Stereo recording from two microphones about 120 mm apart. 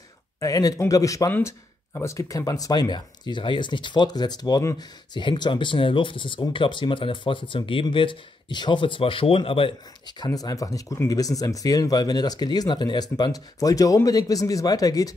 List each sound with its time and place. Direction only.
0.4 s speech: 30° left (ahead or behind)